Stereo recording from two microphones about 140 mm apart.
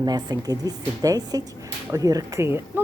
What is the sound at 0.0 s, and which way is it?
A woman's voice, 30° right (ahead or behind).